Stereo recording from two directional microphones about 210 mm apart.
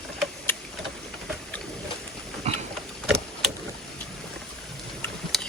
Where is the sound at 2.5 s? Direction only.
30° right (ahead or behind).